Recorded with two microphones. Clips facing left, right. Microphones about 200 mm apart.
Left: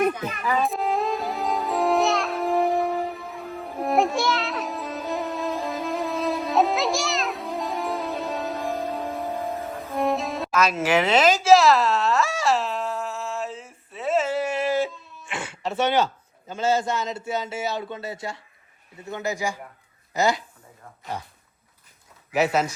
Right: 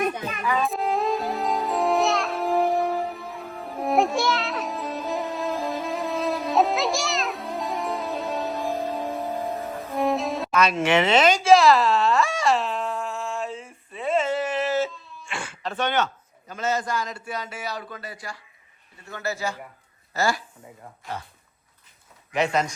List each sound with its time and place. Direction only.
0.6 s music: centre (ahead or behind); by 15.7 s 20° left (ahead or behind)
16.5 s a man's voice: 30° left (ahead or behind)
22.3 s speech: 5° left (ahead or behind)